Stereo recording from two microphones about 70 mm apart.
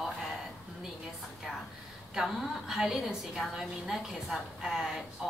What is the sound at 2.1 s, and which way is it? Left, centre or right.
A woman's voice, centre.